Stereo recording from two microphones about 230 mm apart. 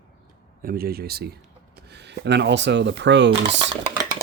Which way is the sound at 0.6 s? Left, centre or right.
Right.